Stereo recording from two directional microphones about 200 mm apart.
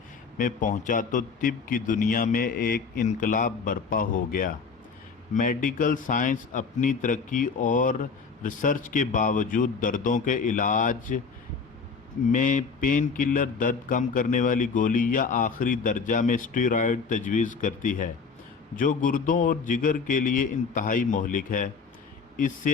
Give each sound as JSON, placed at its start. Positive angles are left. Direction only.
{"t": 0.3, "sound": "a man's voice", "side_deg": 40}
{"t": 12.3, "sound": "speech", "side_deg": 40}